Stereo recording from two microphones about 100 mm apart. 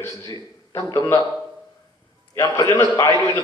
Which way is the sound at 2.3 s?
30° left (ahead or behind).